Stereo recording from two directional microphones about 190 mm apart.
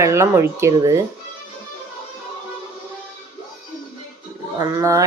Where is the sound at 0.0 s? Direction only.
15° right (ahead or behind).